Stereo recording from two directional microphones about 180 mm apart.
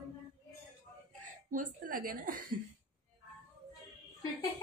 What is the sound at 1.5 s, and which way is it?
A woman's voice, 50° right (ahead or behind).